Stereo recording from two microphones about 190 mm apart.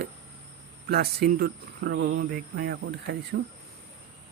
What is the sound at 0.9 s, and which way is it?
Speech, 55° right (ahead or behind).